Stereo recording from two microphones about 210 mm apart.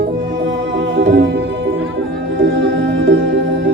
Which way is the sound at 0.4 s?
55° right (ahead or behind).